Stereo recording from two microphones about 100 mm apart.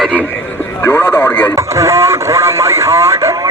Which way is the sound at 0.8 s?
20° left (ahead or behind).